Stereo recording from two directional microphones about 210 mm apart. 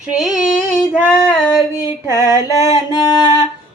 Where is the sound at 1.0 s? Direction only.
10° left (ahead or behind).